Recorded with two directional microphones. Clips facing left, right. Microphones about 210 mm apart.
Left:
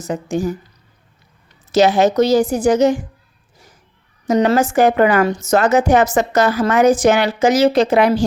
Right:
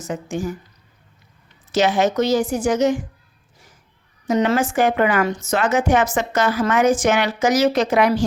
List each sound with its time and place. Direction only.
0.0 s a woman's voice: 35° left (ahead or behind)
1.7 s a woman's voice: 35° left (ahead or behind)
4.3 s a woman's voice: 40° left (ahead or behind)